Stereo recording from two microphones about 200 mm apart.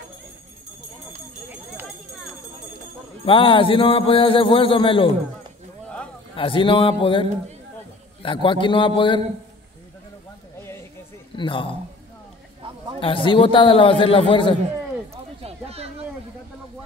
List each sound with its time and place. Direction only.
3.3 s a man's voice: 25° left (ahead or behind)
6.3 s a man's voice: 25° left (ahead or behind)
11.3 s a man's voice: 25° left (ahead or behind)
13.0 s a man's voice: 25° left (ahead or behind)
15.4 s a sound: 30° right (ahead or behind)